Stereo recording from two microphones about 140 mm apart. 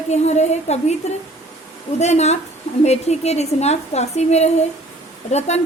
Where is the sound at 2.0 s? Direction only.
50° left (ahead or behind).